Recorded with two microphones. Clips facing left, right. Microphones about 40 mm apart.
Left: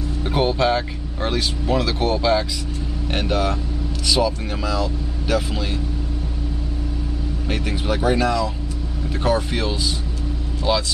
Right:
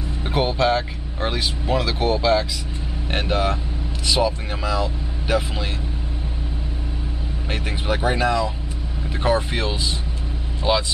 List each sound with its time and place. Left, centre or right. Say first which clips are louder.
0.2 s speech: left 1 dB; centre
3.1 s speech: even; right
7.4 s speech: left 1 dB; centre